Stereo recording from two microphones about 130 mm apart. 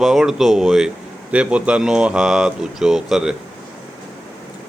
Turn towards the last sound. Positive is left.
turn(degrees=-5)  # may be behind; listen again after turning